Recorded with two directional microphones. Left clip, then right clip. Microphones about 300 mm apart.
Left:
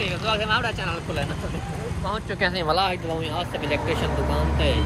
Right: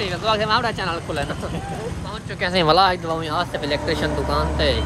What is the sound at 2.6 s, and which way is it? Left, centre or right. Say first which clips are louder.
Speech: right 10 dB; right.